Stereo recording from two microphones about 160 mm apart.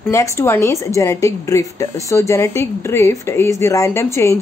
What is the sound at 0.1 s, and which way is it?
A woman's voice, 20° left (ahead or behind).